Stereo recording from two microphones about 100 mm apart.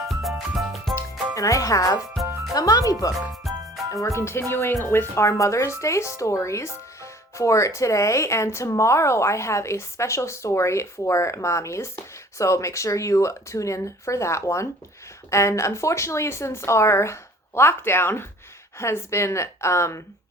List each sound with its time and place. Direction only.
0.1 s music: centre (ahead or behind)
1.4 s speech: 35° left (ahead or behind)
2.2 s music: centre (ahead or behind)
2.6 s speech: 35° left (ahead or behind)
3.5 s music: centre (ahead or behind)
3.9 s speech: 30° left (ahead or behind)